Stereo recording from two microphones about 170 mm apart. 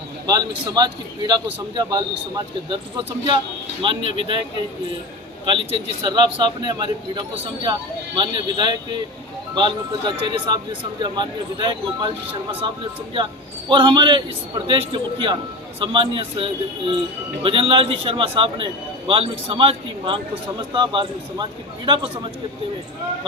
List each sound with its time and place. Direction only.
0.3 s a man's voice: 25° right (ahead or behind)
5.5 s speech: 30° right (ahead or behind)
13.7 s a man's voice: 30° right (ahead or behind)